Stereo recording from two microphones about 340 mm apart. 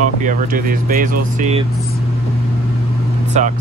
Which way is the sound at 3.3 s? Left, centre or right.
Centre.